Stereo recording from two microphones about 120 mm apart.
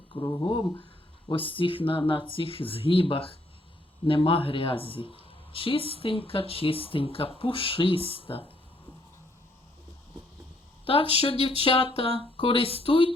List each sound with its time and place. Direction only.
0.1 s speech: 35° left (ahead or behind)
0.4 s speech: 45° left (ahead or behind)
10.8 s speech: 50° left (ahead or behind)